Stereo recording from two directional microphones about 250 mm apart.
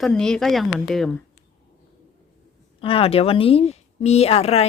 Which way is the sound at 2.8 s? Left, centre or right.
Left.